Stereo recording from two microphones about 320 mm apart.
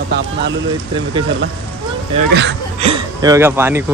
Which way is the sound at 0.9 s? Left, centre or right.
Centre.